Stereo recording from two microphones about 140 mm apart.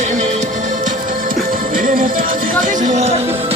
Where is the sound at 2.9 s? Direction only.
50° right (ahead or behind).